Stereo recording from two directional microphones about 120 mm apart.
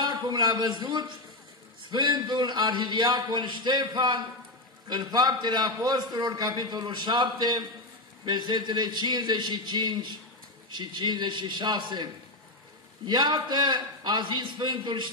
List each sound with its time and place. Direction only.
0.0 s a man's voice: 35° right (ahead or behind)